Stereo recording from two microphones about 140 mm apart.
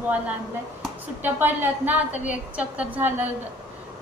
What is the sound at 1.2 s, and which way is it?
A woman's voice, 15° right (ahead or behind).